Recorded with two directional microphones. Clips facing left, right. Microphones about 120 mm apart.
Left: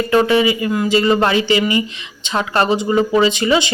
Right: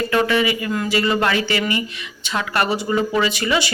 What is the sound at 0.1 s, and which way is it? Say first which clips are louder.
Speech: left 6 dB; 25° left (ahead or behind).